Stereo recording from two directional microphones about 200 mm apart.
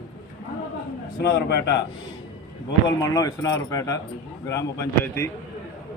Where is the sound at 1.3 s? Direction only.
55° left (ahead or behind).